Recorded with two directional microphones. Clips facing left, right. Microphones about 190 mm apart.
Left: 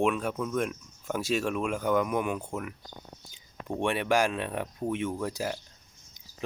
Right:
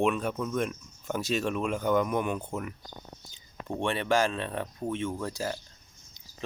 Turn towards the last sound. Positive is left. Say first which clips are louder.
# left 1 dB
turn(degrees=15)  # may be behind; listen again after turning